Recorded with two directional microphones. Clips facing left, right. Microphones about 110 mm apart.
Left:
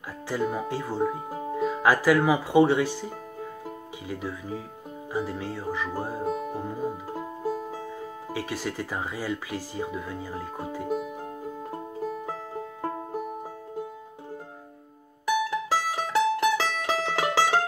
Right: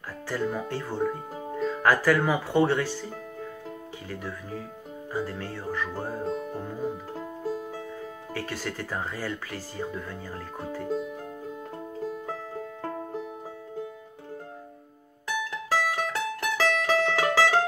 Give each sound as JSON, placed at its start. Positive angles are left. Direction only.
{"t": 0.3, "sound": "speech", "side_deg": 15}
{"t": 12.3, "sound": "music", "side_deg": 15}
{"t": 15.2, "sound": "music", "side_deg": 15}